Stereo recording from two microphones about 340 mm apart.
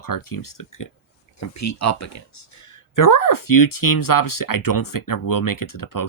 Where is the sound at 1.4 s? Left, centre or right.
Left.